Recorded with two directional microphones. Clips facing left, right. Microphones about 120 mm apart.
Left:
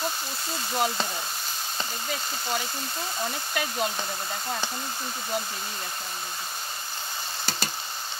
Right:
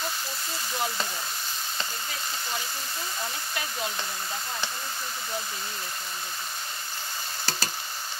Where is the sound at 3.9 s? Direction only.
20° left (ahead or behind).